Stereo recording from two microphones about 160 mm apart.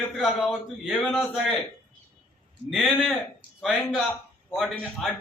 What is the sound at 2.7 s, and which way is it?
Speech, centre (ahead or behind).